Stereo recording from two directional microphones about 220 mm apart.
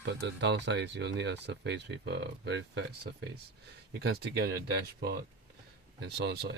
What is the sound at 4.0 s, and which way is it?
Speech, 50° right (ahead or behind).